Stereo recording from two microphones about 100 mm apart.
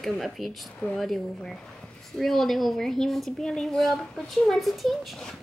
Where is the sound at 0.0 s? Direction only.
Centre (ahead or behind).